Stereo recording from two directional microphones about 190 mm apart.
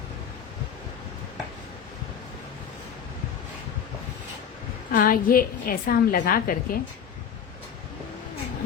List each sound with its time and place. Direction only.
4.9 s a woman's voice: 50° left (ahead or behind)